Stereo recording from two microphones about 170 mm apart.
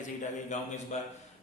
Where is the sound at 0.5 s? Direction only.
45° left (ahead or behind).